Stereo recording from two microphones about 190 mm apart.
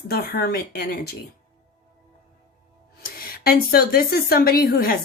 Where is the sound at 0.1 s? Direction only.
55° left (ahead or behind).